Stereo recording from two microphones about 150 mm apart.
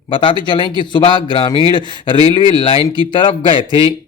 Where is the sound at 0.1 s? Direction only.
30° left (ahead or behind).